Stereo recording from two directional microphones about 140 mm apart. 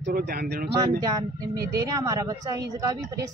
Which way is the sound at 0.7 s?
25° right (ahead or behind).